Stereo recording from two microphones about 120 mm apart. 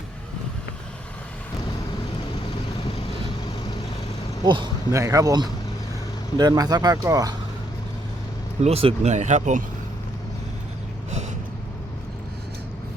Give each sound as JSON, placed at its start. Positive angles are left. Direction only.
{"t": 4.4, "sound": "speech", "side_deg": -40}
{"t": 4.9, "sound": "speech", "side_deg": -25}
{"t": 8.6, "sound": "speech", "side_deg": -55}
{"t": 9.0, "sound": "speech", "side_deg": -75}